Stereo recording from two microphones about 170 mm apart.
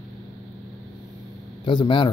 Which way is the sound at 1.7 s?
30° left (ahead or behind).